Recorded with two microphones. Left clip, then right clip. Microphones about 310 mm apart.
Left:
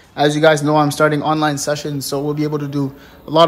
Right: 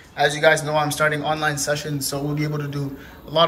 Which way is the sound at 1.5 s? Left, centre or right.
Centre.